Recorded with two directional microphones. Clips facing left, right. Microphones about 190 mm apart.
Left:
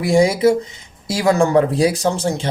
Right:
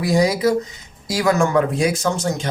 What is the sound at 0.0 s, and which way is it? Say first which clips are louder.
Speech: left 3 dB; 25° left (ahead or behind).